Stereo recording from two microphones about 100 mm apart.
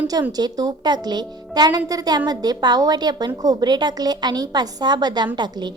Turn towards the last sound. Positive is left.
turn(degrees=-50)  # may be behind; listen again after turning